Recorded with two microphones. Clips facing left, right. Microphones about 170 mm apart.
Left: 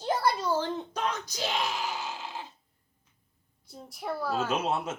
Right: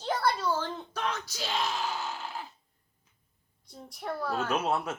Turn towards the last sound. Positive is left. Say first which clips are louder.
# even
turn(degrees=20)  # may be behind; listen again after turning